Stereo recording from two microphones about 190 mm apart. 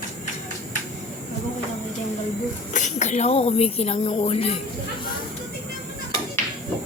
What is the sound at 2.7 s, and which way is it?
Speech, 40° left (ahead or behind).